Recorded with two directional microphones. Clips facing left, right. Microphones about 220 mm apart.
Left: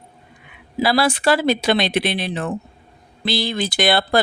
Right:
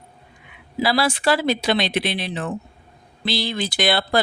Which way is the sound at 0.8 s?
50° left (ahead or behind).